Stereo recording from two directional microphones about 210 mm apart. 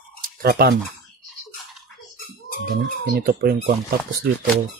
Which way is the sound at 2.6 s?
45° right (ahead or behind).